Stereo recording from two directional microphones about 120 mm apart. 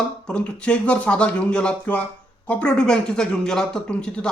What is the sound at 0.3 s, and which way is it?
Speech, 10° left (ahead or behind).